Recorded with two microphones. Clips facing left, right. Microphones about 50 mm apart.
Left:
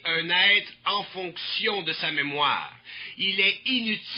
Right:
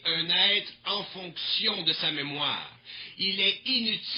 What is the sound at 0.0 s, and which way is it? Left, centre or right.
A man's voice, left.